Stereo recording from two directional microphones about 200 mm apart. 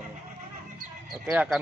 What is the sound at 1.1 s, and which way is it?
Speech, 5° right (ahead or behind).